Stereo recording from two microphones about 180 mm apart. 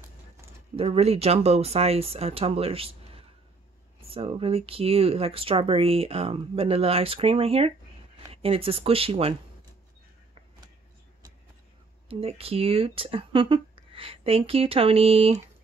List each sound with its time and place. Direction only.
0.7 s speech: 35° right (ahead or behind)
12.1 s speech: 35° right (ahead or behind)